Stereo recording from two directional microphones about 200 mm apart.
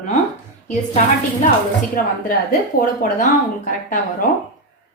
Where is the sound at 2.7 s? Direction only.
45° left (ahead or behind).